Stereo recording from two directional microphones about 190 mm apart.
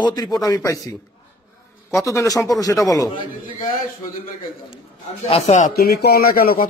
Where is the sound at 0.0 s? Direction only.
20° left (ahead or behind).